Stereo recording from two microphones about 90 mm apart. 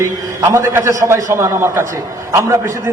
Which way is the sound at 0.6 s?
30° right (ahead or behind).